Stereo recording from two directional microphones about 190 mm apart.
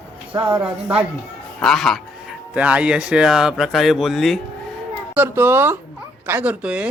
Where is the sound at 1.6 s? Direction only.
Centre (ahead or behind).